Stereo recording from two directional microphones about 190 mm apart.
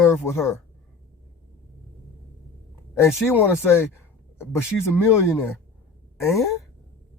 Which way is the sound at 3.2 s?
10° left (ahead or behind).